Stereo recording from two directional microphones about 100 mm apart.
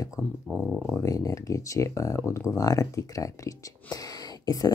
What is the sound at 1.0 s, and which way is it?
Speech, 35° left (ahead or behind).